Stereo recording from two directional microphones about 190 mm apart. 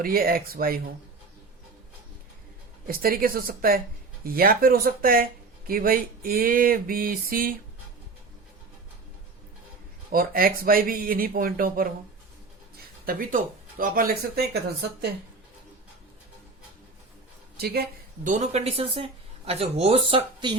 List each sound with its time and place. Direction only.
0.0 s speech: 50° right (ahead or behind)
2.8 s speech: 50° right (ahead or behind)
10.1 s speech: 50° right (ahead or behind)
13.1 s speech: 50° right (ahead or behind)
17.6 s speech: 55° right (ahead or behind); by 20.6 s 25° right (ahead or behind)